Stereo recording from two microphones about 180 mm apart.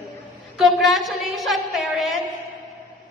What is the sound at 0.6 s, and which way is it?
A woman's voice, centre (ahead or behind).